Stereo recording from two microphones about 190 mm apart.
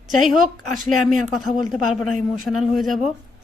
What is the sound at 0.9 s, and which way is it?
Speech, centre (ahead or behind).